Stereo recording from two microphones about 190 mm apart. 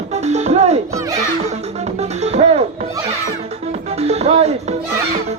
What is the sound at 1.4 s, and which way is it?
Music, 35° right (ahead or behind).